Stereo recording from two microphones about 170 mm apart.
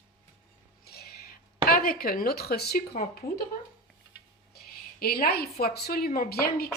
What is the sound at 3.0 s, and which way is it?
Speech, 60° left (ahead or behind).